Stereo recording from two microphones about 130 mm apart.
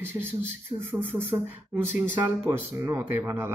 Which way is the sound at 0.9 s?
15° right (ahead or behind).